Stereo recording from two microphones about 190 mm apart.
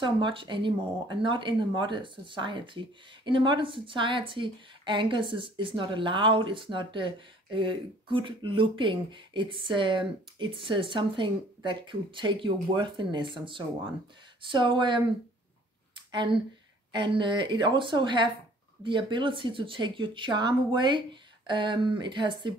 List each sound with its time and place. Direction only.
0.0 s speech: 25° right (ahead or behind)
16.1 s speech: 25° right (ahead or behind)